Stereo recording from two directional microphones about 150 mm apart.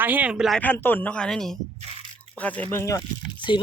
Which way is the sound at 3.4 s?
30° left (ahead or behind).